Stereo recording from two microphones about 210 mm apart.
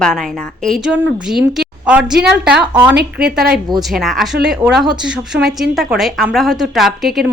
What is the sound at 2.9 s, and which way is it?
Speech, 50° right (ahead or behind).